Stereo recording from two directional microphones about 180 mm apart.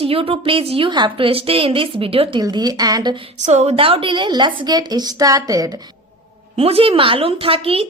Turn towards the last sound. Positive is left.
turn(degrees=-30)  # may be behind; listen again after turning